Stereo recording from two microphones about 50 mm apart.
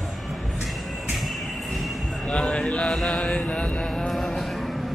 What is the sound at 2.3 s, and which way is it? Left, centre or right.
Speech, left.